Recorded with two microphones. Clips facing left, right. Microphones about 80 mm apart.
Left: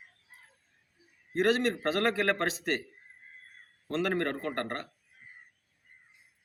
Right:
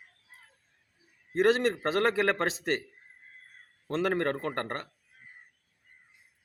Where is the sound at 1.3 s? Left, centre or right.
Right.